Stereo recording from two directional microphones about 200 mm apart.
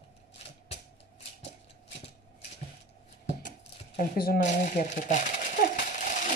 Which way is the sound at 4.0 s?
45° left (ahead or behind).